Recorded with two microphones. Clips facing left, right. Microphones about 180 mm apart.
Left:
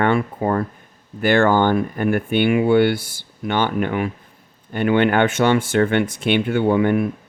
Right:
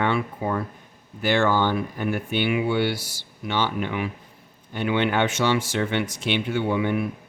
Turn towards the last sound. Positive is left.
turn(degrees=50)  # may be behind; listen again after turning